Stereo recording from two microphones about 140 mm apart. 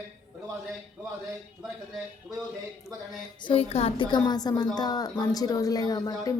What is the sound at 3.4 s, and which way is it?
A woman's voice, 45° left (ahead or behind).